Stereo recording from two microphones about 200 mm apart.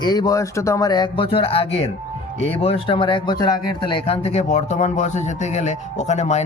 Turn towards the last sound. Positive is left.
turn(degrees=35)  # may be behind; listen again after turning